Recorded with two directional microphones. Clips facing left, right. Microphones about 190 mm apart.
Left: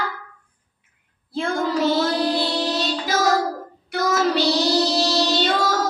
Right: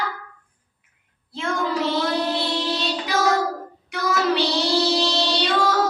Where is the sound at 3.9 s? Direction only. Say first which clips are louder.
Left 2 dB; 40° left (ahead or behind).